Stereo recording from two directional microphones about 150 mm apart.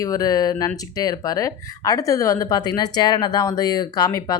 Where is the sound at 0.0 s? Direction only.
25° left (ahead or behind).